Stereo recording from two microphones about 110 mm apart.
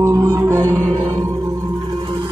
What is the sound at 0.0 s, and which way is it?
Music, 30° right (ahead or behind).